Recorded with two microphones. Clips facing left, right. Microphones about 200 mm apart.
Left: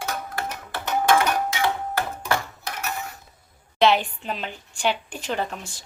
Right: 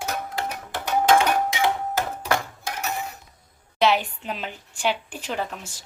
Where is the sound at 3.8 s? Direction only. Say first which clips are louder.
Left 2 dB; 5° right (ahead or behind).